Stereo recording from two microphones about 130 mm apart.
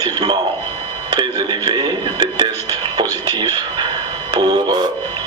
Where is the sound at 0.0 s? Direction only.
30° right (ahead or behind).